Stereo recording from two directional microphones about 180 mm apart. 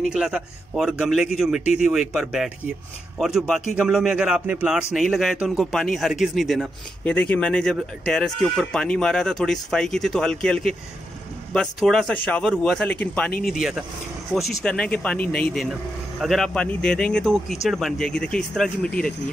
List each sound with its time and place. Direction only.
0.0 s speech: 5° right (ahead or behind)
13.5 s speech: centre (ahead or behind)